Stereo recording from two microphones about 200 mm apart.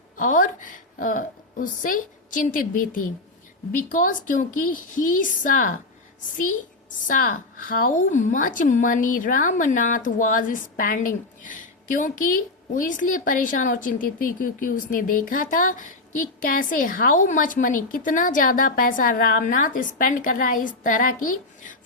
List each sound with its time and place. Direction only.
0.2 s a woman's voice: 40° left (ahead or behind)
7.0 s a woman's voice: 45° left (ahead or behind)